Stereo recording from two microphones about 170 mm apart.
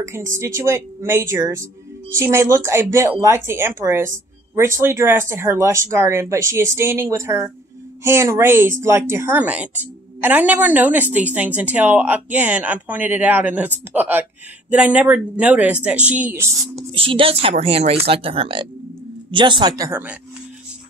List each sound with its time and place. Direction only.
0.6 s a woman's voice: 15° right (ahead or behind)
16.9 s speech: 30° right (ahead or behind); by 20.2 s 10° right (ahead or behind)